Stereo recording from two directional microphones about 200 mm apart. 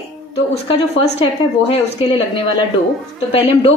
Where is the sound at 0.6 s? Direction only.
30° left (ahead or behind).